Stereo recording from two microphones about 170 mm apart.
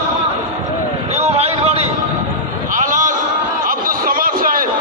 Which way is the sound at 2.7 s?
50° right (ahead or behind).